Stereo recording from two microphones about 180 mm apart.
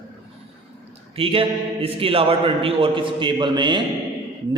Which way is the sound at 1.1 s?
30° right (ahead or behind).